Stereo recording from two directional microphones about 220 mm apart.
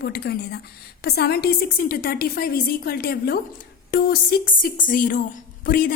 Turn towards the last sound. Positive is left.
turn(degrees=40)  # may be behind; listen again after turning